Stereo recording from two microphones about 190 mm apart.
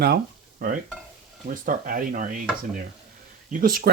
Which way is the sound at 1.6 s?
45° right (ahead or behind).